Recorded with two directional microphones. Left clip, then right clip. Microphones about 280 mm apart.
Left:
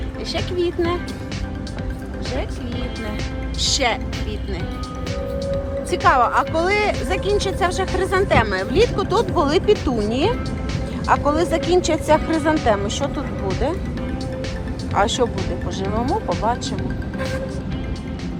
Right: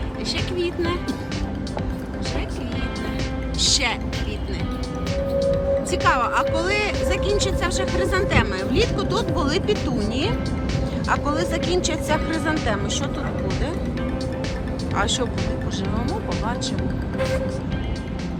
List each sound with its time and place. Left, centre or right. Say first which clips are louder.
0.3 s speech: left 5 dB; centre
5.4 s speech: right 6 dB; centre
14.9 s speech: left 5 dB; centre